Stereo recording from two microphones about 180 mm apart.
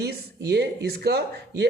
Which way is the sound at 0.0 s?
65° right (ahead or behind).